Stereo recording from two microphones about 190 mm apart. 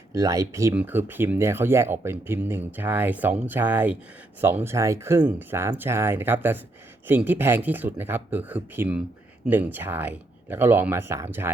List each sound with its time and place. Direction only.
0.1 s speech: 15° right (ahead or behind)